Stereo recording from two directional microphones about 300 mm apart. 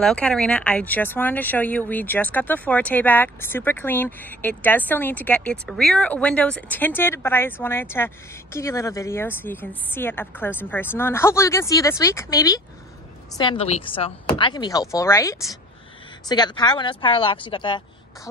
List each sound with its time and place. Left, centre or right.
0.0 s speech: centre